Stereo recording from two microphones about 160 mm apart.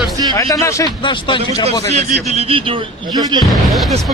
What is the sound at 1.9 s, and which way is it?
A man's voice, 45° right (ahead or behind).